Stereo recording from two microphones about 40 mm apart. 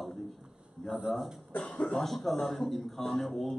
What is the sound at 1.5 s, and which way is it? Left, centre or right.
Speech, left.